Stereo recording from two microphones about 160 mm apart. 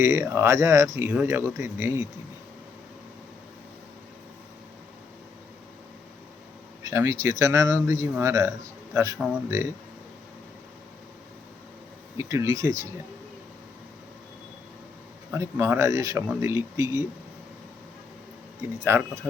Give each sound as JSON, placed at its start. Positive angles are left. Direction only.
{"t": 0.0, "sound": "speech", "side_deg": -20}
{"t": 6.8, "sound": "speech", "side_deg": -20}
{"t": 12.1, "sound": "speech", "side_deg": -20}
{"t": 15.3, "sound": "speech", "side_deg": -15}
{"t": 18.9, "sound": "speech", "side_deg": -15}